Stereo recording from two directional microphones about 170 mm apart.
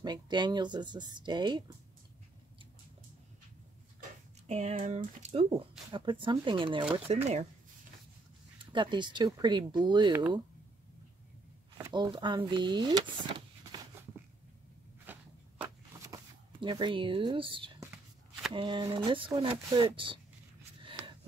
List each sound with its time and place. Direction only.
0.0 s speech: 25° right (ahead or behind)
4.5 s speech: 45° right (ahead or behind)
8.5 s speech: 30° right (ahead or behind)
11.9 s speech: 25° right (ahead or behind)
15.0 s walk: 10° right (ahead or behind)
16.1 s speech: 25° right (ahead or behind)